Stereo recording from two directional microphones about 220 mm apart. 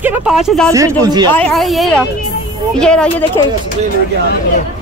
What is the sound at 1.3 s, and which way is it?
Speech, 5° left (ahead or behind).